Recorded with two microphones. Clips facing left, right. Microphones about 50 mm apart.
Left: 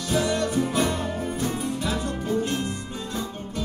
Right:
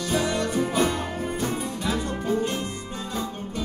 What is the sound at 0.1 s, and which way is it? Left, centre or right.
Music, centre.